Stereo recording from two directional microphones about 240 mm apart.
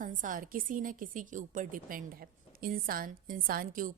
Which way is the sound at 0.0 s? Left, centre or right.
Right.